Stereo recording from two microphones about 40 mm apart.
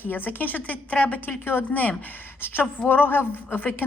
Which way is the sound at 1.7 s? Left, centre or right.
Left.